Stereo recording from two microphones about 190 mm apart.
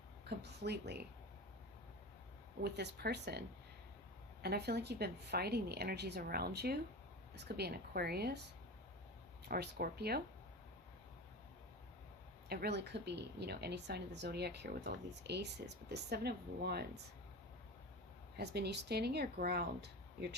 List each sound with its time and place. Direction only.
0.3 s speech: 60° right (ahead or behind)
2.6 s speech: 60° right (ahead or behind)
4.4 s speech: 60° right (ahead or behind)
9.5 s speech: 55° right (ahead or behind)
12.5 s speech: 55° right (ahead or behind)
18.3 s speech: 60° right (ahead or behind)